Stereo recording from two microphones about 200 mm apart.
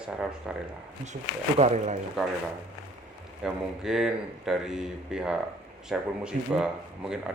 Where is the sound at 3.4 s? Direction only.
Centre (ahead or behind).